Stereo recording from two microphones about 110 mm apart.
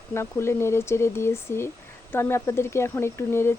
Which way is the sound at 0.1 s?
25° left (ahead or behind).